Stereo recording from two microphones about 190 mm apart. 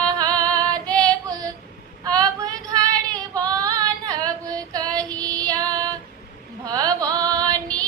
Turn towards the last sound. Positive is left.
turn(degrees=5)  # may be behind; listen again after turning